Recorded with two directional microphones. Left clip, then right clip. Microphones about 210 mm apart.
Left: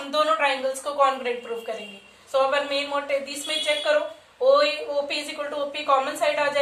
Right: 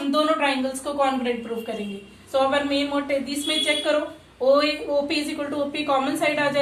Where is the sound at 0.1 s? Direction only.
20° left (ahead or behind).